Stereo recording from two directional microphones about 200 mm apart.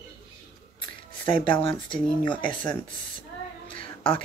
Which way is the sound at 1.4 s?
25° left (ahead or behind).